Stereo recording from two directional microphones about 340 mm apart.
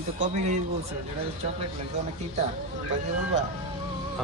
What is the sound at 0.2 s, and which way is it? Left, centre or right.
Speech, centre.